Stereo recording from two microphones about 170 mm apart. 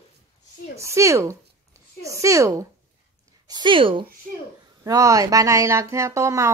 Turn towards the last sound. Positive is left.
turn(degrees=-15)  # may be behind; listen again after turning